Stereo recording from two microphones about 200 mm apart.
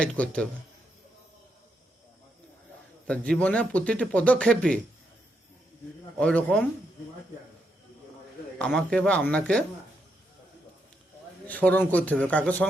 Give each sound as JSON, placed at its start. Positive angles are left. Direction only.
{"t": 0.0, "sound": "a man's voice", "side_deg": 5}
{"t": 3.1, "sound": "speech", "side_deg": 5}
{"t": 6.1, "sound": "a man's voice", "side_deg": 5}
{"t": 8.5, "sound": "a man's voice", "side_deg": 5}
{"t": 11.4, "sound": "speech", "side_deg": 10}